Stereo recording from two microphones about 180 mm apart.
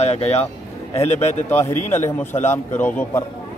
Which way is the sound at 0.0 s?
35° left (ahead or behind).